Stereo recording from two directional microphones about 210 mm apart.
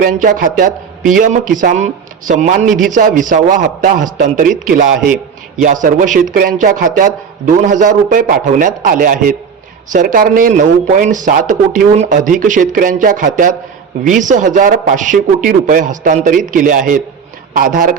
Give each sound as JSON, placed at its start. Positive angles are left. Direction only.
{"t": 0.0, "sound": "a man's voice", "side_deg": -40}
{"t": 6.1, "sound": "a man's voice", "side_deg": -40}